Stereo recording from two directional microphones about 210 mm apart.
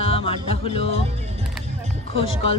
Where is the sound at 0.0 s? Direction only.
25° left (ahead or behind).